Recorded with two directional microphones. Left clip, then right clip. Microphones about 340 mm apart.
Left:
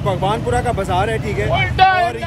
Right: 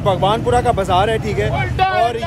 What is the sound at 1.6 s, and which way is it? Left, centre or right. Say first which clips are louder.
Vehicle: left 5 dB; left.